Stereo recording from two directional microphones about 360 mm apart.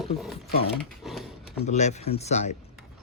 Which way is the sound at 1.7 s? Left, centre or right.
Centre.